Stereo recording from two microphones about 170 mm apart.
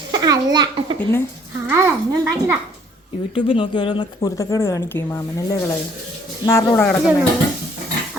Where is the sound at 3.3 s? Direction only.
30° left (ahead or behind).